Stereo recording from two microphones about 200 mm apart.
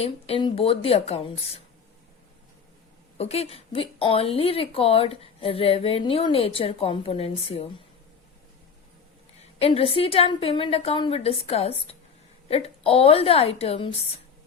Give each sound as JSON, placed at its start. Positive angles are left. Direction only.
{"t": 0.0, "sound": "speech", "side_deg": 25}
{"t": 3.2, "sound": "speech", "side_deg": 30}
{"t": 9.6, "sound": "speech", "side_deg": 30}